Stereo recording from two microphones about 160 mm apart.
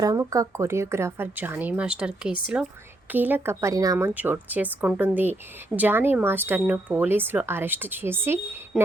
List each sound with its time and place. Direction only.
0.0 s a woman's voice: 20° right (ahead or behind)
8.7 s speech: 5° right (ahead or behind)